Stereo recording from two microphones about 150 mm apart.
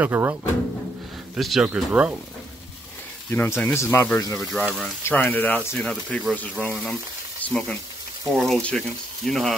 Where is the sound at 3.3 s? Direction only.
10° left (ahead or behind).